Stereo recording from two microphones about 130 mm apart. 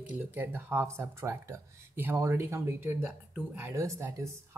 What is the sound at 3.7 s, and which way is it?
Speech, 25° right (ahead or behind).